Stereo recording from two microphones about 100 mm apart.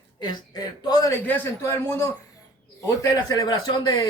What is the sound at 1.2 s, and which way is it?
Speech, 20° left (ahead or behind).